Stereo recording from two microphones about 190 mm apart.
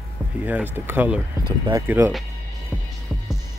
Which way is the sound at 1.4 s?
25° right (ahead or behind).